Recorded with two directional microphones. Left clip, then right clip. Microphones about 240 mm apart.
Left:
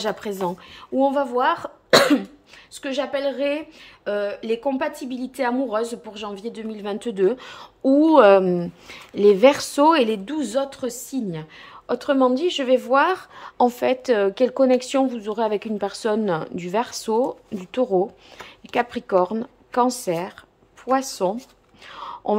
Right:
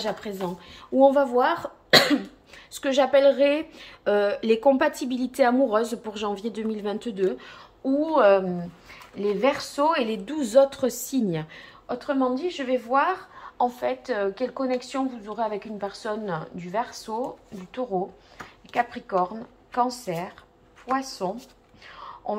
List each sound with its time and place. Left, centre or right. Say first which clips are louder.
0.0 s speech: left 4 dB; centre
0.9 s speech: right 2 dB; centre
2.8 s a woman's voice: right 5 dB; centre; by 10.2 s left
10.2 s a woman's voice: right 5 dB; centre
11.9 s a woman's voice: left 6 dB; left
18.7 s speech: left 4 dB; left